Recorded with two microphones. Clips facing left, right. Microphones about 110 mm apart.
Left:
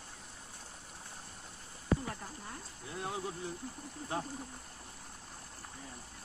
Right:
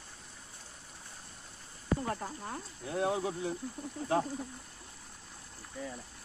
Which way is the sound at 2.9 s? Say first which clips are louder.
Right 8 dB; 90° right.